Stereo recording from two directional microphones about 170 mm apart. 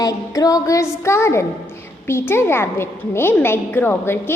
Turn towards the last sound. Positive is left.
turn(degrees=15)  # may be behind; listen again after turning